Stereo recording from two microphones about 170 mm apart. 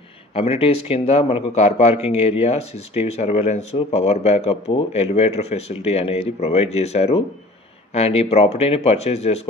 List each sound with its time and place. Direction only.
0.3 s speech: 35° left (ahead or behind)